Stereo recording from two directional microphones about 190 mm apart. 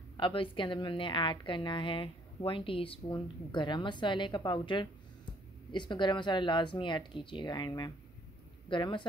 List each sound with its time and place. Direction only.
0.2 s a woman's voice: 25° left (ahead or behind)